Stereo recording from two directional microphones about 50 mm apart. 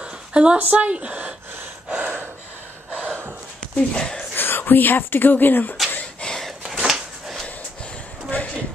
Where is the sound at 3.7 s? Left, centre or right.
Centre.